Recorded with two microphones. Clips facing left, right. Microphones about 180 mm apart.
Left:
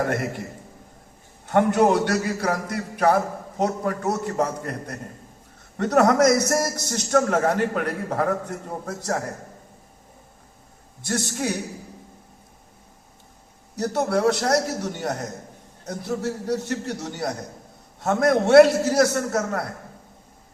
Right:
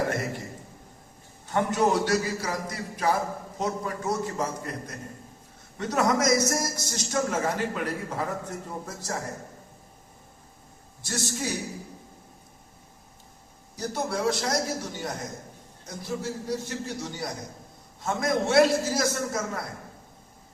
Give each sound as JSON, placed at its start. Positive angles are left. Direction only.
{"t": 0.1, "sound": "a man's voice", "side_deg": 55}
{"t": 1.5, "sound": "a man's voice", "side_deg": 60}
{"t": 11.0, "sound": "a man's voice", "side_deg": 55}
{"t": 13.7, "sound": "a man's voice", "side_deg": 65}